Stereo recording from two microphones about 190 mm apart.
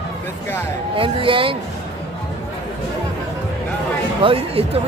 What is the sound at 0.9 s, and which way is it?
Speech, 30° right (ahead or behind).